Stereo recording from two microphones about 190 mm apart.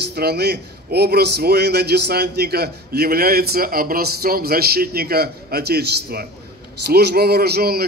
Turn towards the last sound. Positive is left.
turn(degrees=-55)  # may be behind; listen again after turning